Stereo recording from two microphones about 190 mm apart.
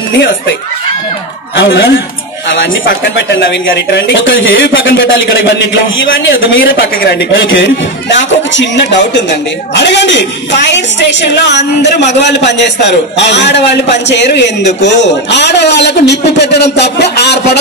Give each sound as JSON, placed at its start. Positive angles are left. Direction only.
{"t": 1.6, "sound": "a man's voice", "side_deg": 65}
{"t": 2.5, "sound": "a woman's voice", "side_deg": 75}
{"t": 9.8, "sound": "a woman's voice", "side_deg": 70}